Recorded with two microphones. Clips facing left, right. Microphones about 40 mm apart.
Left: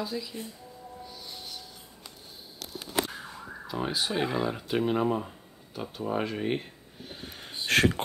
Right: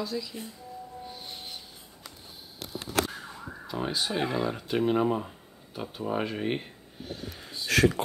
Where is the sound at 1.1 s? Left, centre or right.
Right.